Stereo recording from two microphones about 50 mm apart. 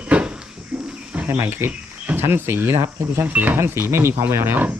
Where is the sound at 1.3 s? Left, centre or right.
Right.